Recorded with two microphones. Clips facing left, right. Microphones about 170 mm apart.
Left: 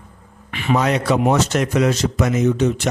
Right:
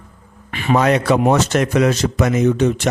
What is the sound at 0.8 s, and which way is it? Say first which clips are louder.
Speech: right 4 dB; 55° right (ahead or behind).